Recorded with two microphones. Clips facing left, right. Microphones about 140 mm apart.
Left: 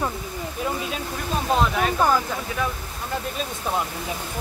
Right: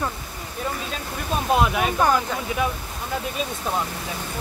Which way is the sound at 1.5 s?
10° right (ahead or behind).